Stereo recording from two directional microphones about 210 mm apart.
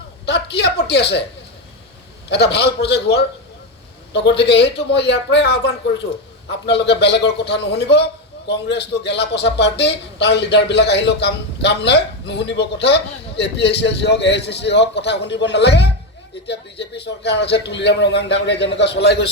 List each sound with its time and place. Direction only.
0.3 s a man's voice: 55° left (ahead or behind)
2.3 s a man's voice: 55° left (ahead or behind)